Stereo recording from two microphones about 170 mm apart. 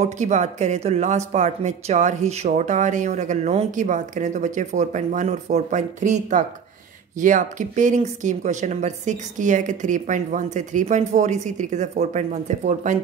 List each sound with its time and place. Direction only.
0.0 s speech: 45° right (ahead or behind)